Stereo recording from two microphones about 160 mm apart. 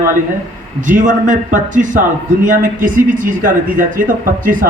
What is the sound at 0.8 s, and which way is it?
A man's voice, 55° right (ahead or behind).